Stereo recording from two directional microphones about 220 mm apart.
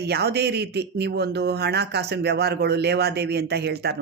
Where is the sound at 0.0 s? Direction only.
50° right (ahead or behind).